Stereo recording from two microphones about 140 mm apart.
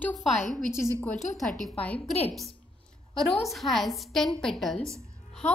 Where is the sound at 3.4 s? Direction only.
Centre (ahead or behind).